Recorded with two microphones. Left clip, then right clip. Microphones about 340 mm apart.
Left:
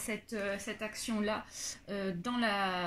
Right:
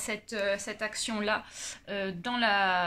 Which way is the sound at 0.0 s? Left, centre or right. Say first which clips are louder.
Right 6 dB; right.